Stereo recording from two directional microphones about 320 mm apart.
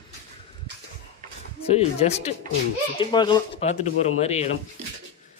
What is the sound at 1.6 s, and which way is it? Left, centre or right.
Speech, centre.